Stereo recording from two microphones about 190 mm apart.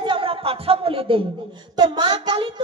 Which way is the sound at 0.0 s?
25° right (ahead or behind).